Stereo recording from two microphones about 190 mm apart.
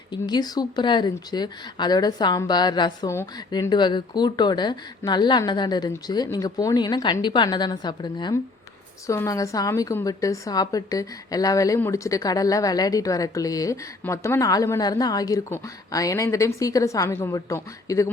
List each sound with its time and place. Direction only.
0.1 s a woman's voice: 20° left (ahead or behind)